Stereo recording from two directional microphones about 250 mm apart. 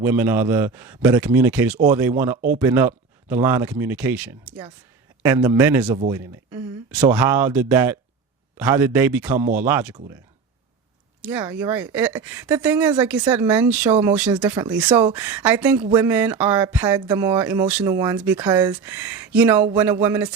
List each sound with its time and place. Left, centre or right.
0.0 s speech: centre
11.3 s speech: centre